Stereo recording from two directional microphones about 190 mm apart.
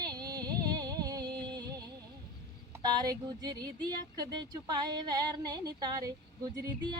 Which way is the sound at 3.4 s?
20° right (ahead or behind).